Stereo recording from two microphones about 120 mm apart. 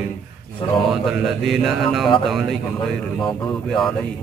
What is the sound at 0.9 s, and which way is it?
Mantra, centre (ahead or behind).